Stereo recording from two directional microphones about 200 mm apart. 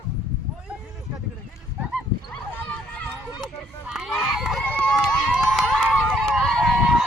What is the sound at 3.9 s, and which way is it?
Run, centre (ahead or behind).